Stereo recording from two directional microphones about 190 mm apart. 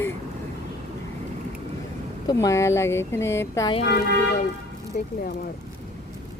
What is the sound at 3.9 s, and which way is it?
Speech, 60° left (ahead or behind).